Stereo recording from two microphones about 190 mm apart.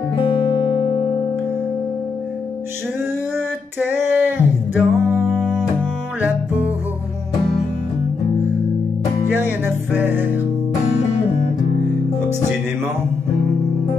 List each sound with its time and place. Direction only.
0.6 s music: 25° left (ahead or behind)
3.9 s music: 10° right (ahead or behind)
9.3 s music: 10° right (ahead or behind)